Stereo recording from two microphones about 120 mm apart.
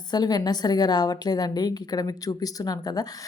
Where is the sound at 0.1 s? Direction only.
35° left (ahead or behind).